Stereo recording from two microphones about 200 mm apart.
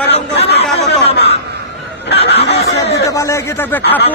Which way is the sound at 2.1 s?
55° left (ahead or behind).